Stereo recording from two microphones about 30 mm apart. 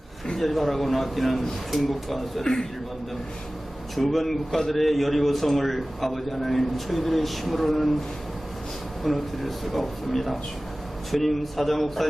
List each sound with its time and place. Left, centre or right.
0.3 s a man's voice: centre
2.4 s a man's voice: left
3.9 s a man's voice: centre
9.0 s a man's voice: centre